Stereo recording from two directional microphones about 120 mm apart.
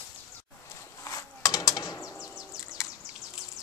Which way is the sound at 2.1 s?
5° right (ahead or behind).